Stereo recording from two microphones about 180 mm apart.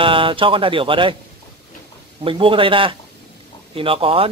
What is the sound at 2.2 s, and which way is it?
Speech, 30° right (ahead or behind).